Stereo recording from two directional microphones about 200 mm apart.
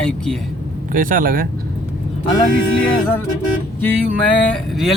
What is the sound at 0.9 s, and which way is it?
Speech, 45° right (ahead or behind).